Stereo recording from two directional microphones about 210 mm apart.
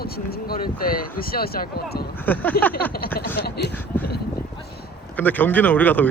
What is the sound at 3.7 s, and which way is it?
Speech, 10° left (ahead or behind).